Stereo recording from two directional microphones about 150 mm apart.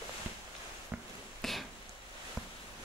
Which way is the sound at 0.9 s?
10° right (ahead or behind).